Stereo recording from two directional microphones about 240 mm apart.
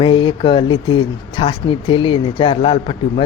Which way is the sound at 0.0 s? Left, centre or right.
Left.